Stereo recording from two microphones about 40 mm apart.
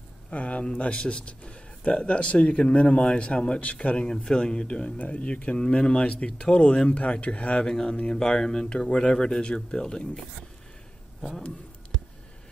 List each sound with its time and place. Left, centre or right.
0.3 s speech: left
0.7 s a man's voice: left
7.6 s a man's voice: centre